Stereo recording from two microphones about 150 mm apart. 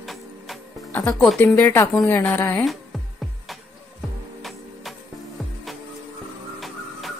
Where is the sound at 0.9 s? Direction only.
5° left (ahead or behind).